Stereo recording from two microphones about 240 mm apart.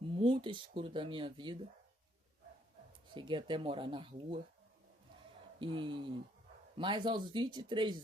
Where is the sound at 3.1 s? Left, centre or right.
Centre.